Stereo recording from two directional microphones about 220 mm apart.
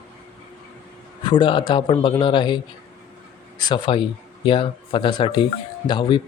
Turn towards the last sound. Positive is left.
turn(degrees=20)  # may be behind; listen again after turning